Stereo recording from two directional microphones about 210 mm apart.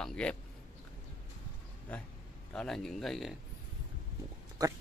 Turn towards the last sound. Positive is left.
turn(degrees=-20)  # may be behind; listen again after turning